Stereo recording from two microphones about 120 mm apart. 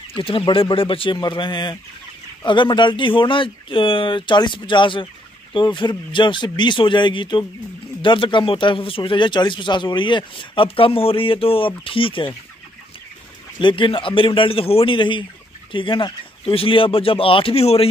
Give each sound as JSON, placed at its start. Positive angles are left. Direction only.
{"t": 0.1, "sound": "a man's voice", "side_deg": 50}
{"t": 13.6, "sound": "a man's voice", "side_deg": 45}